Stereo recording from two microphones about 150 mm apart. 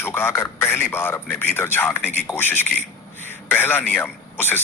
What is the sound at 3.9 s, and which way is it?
Speech, 10° left (ahead or behind).